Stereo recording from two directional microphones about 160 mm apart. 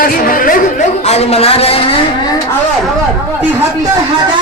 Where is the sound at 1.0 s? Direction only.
40° left (ahead or behind).